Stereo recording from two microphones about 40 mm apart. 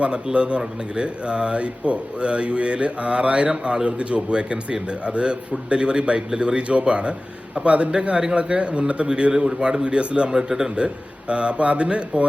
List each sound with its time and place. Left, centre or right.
0.3 s speech: right